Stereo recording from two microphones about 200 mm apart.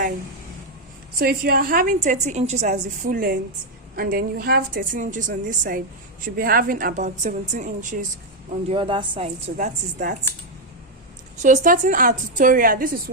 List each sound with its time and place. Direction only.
1.2 s a woman's voice: 50° right (ahead or behind)
8.7 s a woman's voice: 25° right (ahead or behind)
9.6 s a woman's voice: 40° right (ahead or behind)
11.4 s a woman's voice: 40° right (ahead or behind)